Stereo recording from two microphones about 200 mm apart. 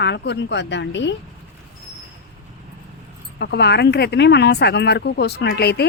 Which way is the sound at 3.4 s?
55° left (ahead or behind).